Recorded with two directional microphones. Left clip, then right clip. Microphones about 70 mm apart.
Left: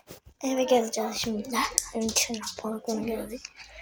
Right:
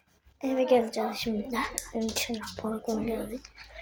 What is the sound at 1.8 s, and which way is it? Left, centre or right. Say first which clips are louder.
A woman's voice: left 4 dB; centre.